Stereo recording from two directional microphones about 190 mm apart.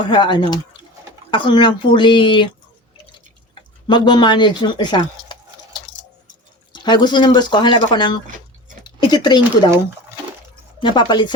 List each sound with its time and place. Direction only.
0.1 s speech: 25° left (ahead or behind)
3.8 s speech: 25° left (ahead or behind)
6.7 s speech: 25° left (ahead or behind)
10.8 s speech: 25° left (ahead or behind)